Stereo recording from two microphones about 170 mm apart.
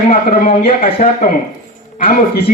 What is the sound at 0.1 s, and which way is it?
A man's voice, 60° left (ahead or behind).